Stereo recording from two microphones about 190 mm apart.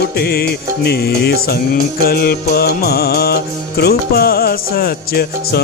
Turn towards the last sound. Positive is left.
turn(degrees=55)  # may be behind; listen again after turning